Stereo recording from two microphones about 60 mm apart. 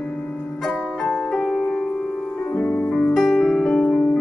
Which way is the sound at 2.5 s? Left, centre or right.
Left.